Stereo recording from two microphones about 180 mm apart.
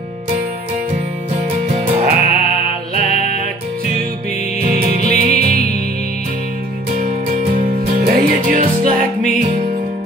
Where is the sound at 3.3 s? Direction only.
50° right (ahead or behind).